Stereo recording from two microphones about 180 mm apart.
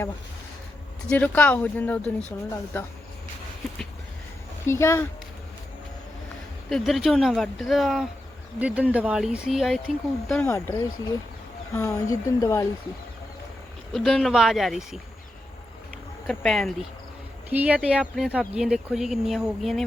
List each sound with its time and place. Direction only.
1.1 s speech: 10° left (ahead or behind)
4.6 s speech: 15° left (ahead or behind)
6.7 s speech: centre (ahead or behind)
10.4 s speech: 15° left (ahead or behind)
13.9 s speech: centre (ahead or behind)
16.2 s speech: 5° left (ahead or behind)
17.5 s speech: 10° right (ahead or behind)